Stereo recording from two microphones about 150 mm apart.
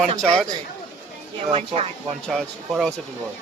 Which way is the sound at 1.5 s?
40° right (ahead or behind).